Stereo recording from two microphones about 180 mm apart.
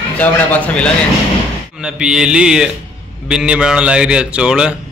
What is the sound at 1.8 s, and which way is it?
A man's voice, 5° right (ahead or behind).